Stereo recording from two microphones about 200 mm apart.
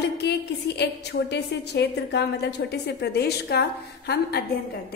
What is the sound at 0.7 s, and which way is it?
A woman's voice, 55° left (ahead or behind).